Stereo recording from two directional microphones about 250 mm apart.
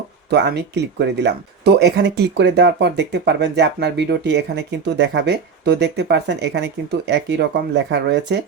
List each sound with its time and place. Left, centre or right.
0.3 s speech: right